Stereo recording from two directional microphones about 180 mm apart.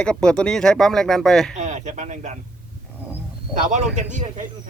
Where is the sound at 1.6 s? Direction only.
40° right (ahead or behind).